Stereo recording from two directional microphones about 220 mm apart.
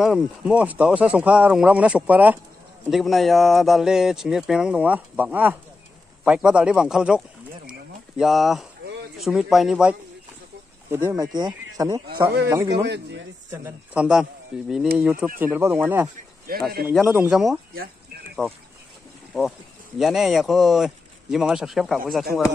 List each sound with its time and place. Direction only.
0.0 s speech: 5° right (ahead or behind)
11.1 s speech: 20° right (ahead or behind)
12.8 s a man's voice: 50° right (ahead or behind)
13.5 s speech: 5° right (ahead or behind)
16.5 s a man's voice: 40° right (ahead or behind)
16.9 s speech: 5° right (ahead or behind)
19.3 s speech: centre (ahead or behind)